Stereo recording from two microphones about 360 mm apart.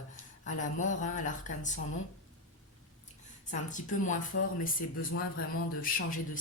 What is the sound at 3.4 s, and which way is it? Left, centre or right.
Speech, left.